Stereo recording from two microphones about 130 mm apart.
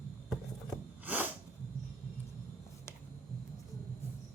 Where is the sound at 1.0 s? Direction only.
15° right (ahead or behind).